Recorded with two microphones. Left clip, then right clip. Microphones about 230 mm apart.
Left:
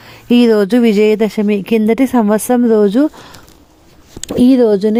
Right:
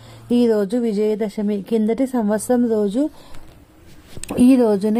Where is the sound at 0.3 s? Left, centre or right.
Left.